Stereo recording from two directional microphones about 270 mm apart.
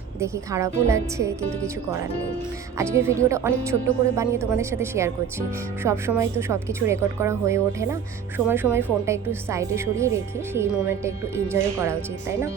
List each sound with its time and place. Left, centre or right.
0.2 s a woman's voice: centre
2.7 s a woman's voice: centre